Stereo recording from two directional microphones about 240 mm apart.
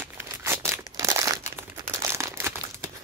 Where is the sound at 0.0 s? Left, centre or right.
Centre.